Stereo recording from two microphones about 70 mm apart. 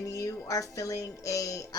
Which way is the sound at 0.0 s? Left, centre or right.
Left.